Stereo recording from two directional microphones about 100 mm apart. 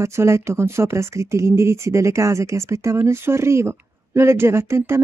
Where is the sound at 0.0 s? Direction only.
30° right (ahead or behind).